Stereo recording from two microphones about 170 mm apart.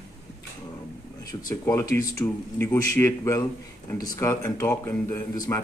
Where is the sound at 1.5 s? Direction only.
20° left (ahead or behind).